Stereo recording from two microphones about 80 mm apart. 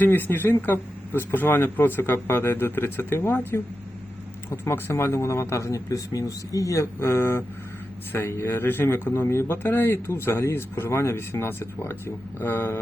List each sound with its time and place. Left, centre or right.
0.0 s speech: left